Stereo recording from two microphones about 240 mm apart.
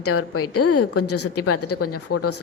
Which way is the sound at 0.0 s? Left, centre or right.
Left.